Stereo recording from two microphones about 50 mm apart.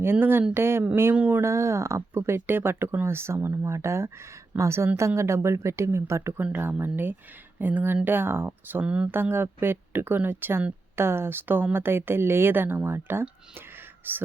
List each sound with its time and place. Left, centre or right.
0.0 s speech: right
1.4 s speech: right
4.5 s a woman's voice: right
6.5 s speech: right
8.0 s speech: right